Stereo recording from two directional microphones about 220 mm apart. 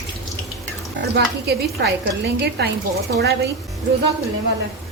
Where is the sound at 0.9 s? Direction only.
45° right (ahead or behind).